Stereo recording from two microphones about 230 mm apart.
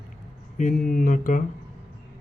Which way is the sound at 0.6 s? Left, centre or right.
Left.